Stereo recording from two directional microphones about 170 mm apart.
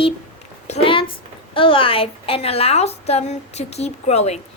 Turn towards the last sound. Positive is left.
turn(degrees=40)  # may be behind; listen again after turning